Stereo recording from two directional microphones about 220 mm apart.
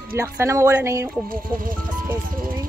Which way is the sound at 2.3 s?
40° right (ahead or behind).